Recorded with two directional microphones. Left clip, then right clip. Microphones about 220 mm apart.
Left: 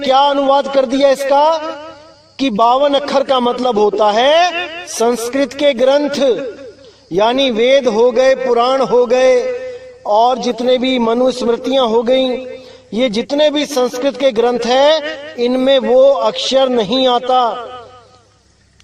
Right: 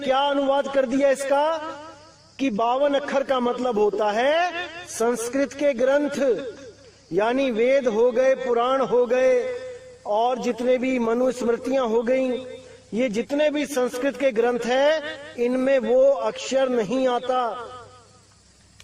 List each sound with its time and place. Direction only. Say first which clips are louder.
0.0 s a man's voice: left 10 dB; 30° left (ahead or behind)
10.1 s a man's voice: left 11 dB; 35° left (ahead or behind)
10.3 s speech: left 8 dB; 25° left (ahead or behind)